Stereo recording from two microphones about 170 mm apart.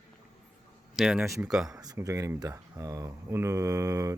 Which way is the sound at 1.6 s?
20° right (ahead or behind).